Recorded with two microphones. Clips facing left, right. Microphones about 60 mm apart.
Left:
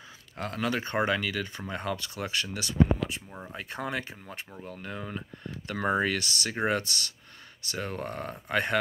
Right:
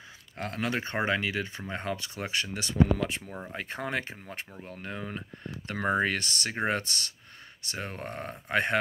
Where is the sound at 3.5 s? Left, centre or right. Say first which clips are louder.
Even; right.